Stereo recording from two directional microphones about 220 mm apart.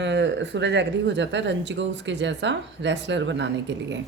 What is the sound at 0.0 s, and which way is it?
Speech, 55° right (ahead or behind).